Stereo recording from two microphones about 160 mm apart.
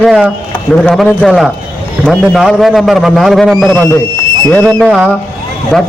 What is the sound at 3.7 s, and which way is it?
A man's voice, 15° left (ahead or behind).